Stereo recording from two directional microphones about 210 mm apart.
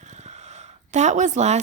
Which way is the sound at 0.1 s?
35° right (ahead or behind).